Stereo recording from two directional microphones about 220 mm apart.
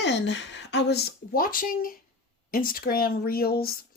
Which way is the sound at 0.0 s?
55° left (ahead or behind).